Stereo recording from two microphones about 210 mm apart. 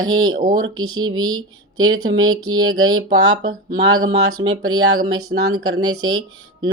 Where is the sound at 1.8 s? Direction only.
75° right (ahead or behind).